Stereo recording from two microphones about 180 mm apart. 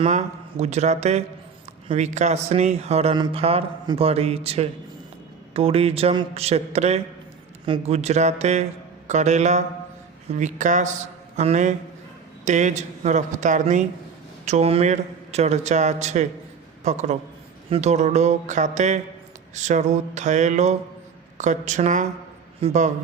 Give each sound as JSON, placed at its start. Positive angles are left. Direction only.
{"t": 0.0, "sound": "a man's voice", "side_deg": -40}